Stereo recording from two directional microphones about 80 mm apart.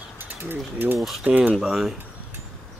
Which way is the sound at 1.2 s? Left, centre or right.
Right.